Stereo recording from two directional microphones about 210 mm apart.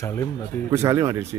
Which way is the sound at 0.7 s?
15° right (ahead or behind).